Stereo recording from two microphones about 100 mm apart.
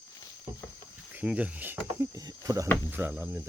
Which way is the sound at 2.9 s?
20° right (ahead or behind).